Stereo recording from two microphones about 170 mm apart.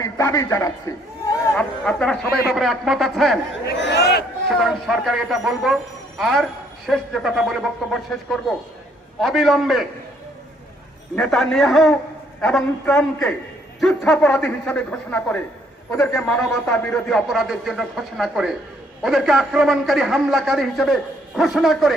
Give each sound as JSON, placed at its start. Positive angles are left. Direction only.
{"t": 0.0, "sound": "a sound", "side_deg": 20}
{"t": 1.2, "sound": "chatter", "side_deg": 15}
{"t": 1.8, "sound": "a man's voice", "side_deg": 5}
{"t": 3.7, "sound": "a sound", "side_deg": 90}
{"t": 4.4, "sound": "a man's voice", "side_deg": 0}
{"t": 11.1, "sound": "a man's voice", "side_deg": 5}